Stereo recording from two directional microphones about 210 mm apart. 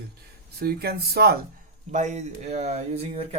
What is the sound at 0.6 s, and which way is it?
Speech, 45° right (ahead or behind).